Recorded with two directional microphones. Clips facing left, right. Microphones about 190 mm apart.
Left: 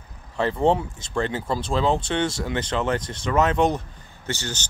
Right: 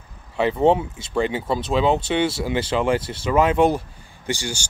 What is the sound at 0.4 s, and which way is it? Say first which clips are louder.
Speech: right 3 dB; 5° right (ahead or behind).